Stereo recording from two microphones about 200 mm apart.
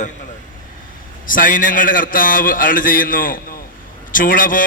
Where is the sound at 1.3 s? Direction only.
45° left (ahead or behind).